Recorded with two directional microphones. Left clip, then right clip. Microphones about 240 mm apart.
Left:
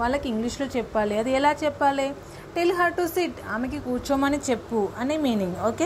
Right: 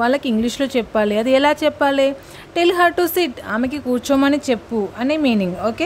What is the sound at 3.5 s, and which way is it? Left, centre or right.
Speech, right.